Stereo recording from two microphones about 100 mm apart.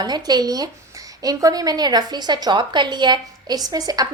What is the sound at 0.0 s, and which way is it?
A woman's voice, 45° right (ahead or behind).